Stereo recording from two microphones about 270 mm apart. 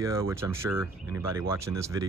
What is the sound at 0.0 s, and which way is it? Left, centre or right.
Speech, centre.